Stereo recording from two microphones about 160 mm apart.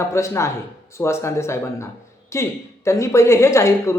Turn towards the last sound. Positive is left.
turn(degrees=20)  # may be behind; listen again after turning